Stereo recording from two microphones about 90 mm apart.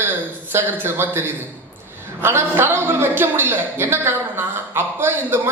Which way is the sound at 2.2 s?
25° right (ahead or behind).